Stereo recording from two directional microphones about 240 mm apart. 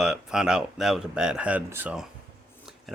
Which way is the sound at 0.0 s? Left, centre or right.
Centre.